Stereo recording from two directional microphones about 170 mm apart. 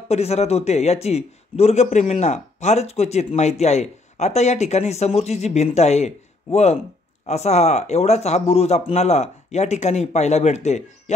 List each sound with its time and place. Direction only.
0.1 s a man's voice: 40° left (ahead or behind)